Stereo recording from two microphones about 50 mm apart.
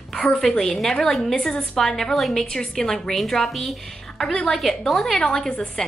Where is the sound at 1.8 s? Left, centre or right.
Centre.